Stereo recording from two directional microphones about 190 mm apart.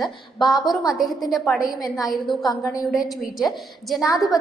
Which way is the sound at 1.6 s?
20° left (ahead or behind).